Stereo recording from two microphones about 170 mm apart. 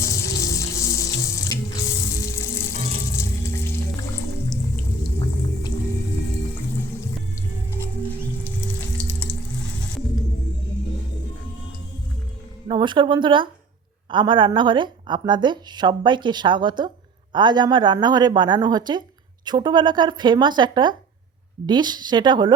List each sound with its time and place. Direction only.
0.1 s water tap: 20° left (ahead or behind)
3.2 s frying: 15° left (ahead or behind)
9.3 s water: 5° left (ahead or behind)
12.6 s speech: 30° right (ahead or behind)